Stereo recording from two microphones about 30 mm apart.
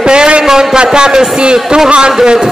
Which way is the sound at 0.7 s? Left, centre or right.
Right.